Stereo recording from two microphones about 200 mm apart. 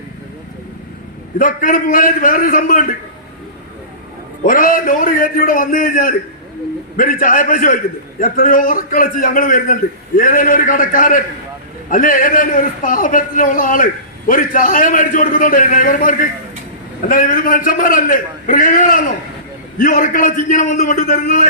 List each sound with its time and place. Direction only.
1.4 s a man's voice: 45° left (ahead or behind)
4.4 s a man's voice: 45° left (ahead or behind)